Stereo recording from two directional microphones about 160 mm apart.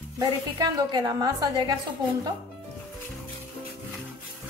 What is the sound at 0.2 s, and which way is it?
A woman's voice, 25° right (ahead or behind).